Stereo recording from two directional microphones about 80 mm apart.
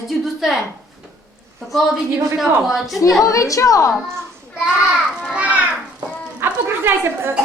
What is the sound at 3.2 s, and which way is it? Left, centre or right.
Speech, left.